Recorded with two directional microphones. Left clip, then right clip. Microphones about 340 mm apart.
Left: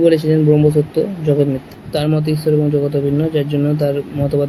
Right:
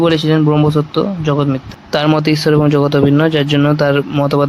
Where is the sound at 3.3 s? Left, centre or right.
Right.